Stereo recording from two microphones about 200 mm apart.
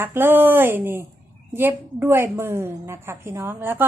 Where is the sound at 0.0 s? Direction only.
10° right (ahead or behind).